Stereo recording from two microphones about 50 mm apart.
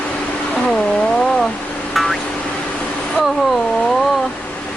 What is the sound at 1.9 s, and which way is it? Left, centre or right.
Music, centre.